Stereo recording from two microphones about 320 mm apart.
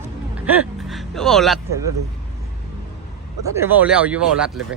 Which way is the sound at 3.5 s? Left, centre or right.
Centre.